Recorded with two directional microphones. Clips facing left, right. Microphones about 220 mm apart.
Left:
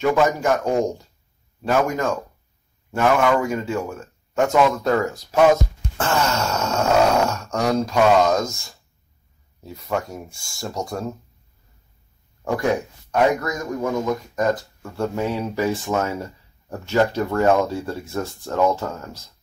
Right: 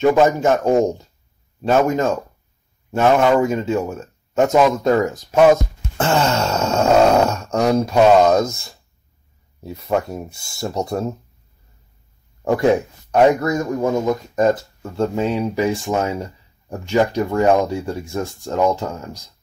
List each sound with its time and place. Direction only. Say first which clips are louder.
0.0 s speech: right 5 dB; 25° right (ahead or behind)
5.9 s wail: right 4 dB; 25° right (ahead or behind)
6.5 s speech: right 5 dB; 30° right (ahead or behind)
9.6 s speech: right 5 dB; 25° right (ahead or behind)
12.4 s speech: right 6 dB; 25° right (ahead or behind)